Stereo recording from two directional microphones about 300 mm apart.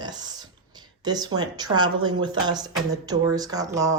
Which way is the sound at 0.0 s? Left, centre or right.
Centre.